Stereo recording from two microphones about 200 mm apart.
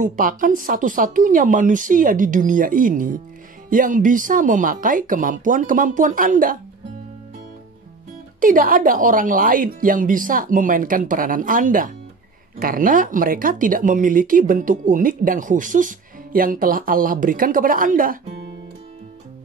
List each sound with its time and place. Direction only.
0.0 s speech: 40° right (ahead or behind)
8.4 s speech: 45° right (ahead or behind)